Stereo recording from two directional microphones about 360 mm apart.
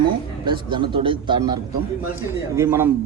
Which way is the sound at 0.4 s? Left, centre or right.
Centre.